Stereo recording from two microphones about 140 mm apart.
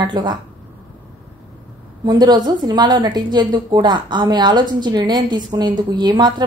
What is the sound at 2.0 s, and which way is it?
Speech, 30° right (ahead or behind).